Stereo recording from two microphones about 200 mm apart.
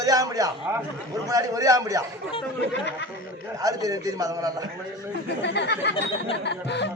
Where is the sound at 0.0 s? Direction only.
15° right (ahead or behind).